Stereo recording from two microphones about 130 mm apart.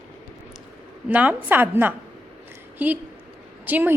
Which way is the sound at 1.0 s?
10° right (ahead or behind).